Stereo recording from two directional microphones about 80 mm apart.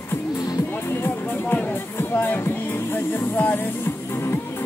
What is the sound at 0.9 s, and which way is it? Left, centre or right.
Music, left.